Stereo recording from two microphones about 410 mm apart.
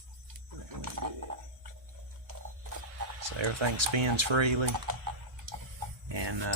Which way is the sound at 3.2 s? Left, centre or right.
Right.